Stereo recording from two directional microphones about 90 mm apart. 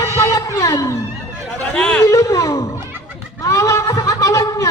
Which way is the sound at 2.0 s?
35° left (ahead or behind).